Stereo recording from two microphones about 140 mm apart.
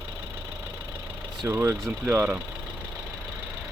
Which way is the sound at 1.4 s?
20° right (ahead or behind).